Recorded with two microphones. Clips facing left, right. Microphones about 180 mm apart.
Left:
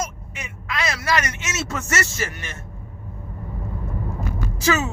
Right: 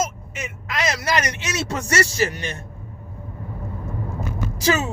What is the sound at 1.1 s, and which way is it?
A man's voice, 35° right (ahead or behind).